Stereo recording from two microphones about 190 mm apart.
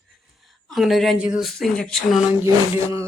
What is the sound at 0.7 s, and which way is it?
Speech, centre (ahead or behind).